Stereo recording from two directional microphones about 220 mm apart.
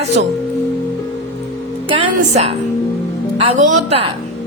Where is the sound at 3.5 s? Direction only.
30° right (ahead or behind).